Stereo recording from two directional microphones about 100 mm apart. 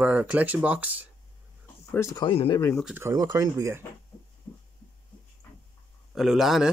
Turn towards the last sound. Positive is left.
turn(degrees=-5)  # may be behind; listen again after turning